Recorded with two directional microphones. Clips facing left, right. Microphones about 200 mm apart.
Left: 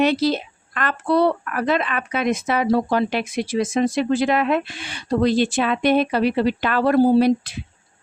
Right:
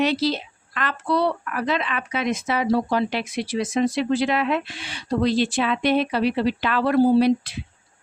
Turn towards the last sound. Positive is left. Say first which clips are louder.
# left 1 dB
turn(degrees=45)  # may be behind; listen again after turning